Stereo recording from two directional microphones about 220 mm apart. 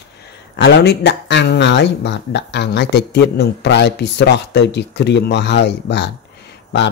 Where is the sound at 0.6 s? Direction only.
50° left (ahead or behind).